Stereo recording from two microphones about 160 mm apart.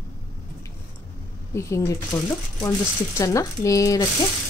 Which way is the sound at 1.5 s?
15° left (ahead or behind).